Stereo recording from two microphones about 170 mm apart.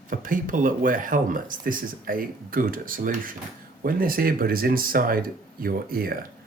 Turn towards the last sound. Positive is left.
turn(degrees=-60)  # may be behind; listen again after turning